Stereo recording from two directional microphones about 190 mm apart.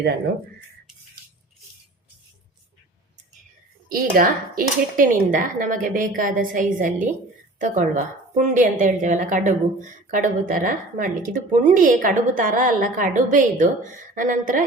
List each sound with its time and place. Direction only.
3.8 s speech: 50° right (ahead or behind)